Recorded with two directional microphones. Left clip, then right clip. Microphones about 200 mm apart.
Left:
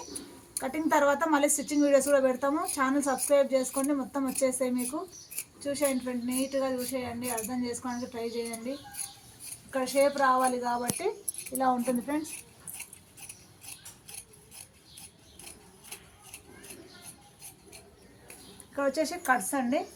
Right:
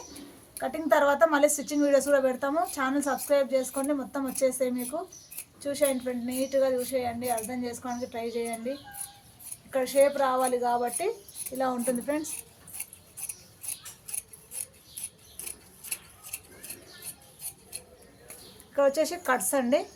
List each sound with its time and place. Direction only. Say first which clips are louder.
0.6 s a woman's voice: right 2 dB; 15° right (ahead or behind)
9.7 s a woman's voice: right 3 dB; 15° right (ahead or behind)
18.7 s a woman's voice: right 5 dB; 10° right (ahead or behind); by 19.8 s 30° right (ahead or behind)